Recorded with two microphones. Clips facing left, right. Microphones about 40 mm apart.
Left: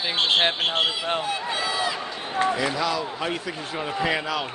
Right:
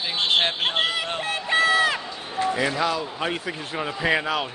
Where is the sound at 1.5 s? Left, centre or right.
Right.